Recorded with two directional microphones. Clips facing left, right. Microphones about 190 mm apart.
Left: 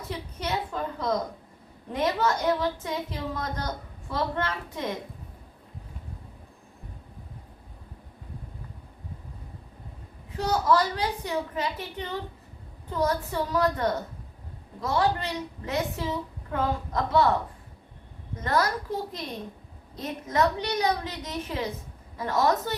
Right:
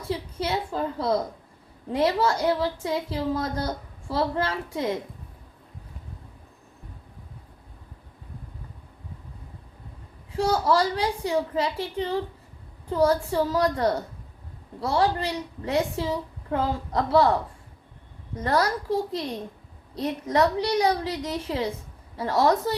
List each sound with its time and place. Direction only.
0.1 s a sound: 30° right (ahead or behind)
1.9 s a woman's voice: 30° right (ahead or behind)
10.3 s a woman's voice: 30° right (ahead or behind)
18.4 s a woman's voice: 30° right (ahead or behind)